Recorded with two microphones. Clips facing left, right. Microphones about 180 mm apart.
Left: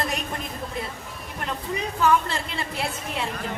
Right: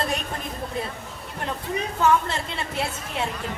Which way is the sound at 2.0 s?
25° right (ahead or behind).